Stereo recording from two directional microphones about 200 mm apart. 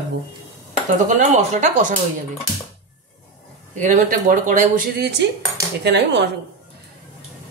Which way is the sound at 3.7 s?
40° right (ahead or behind).